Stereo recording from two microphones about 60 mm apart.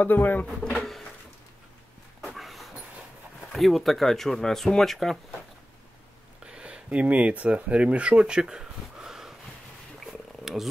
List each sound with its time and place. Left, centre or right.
0.0 s speech: left
2.2 s dog: centre
3.5 s speech: centre
6.4 s speech: centre
10.4 s a sound: centre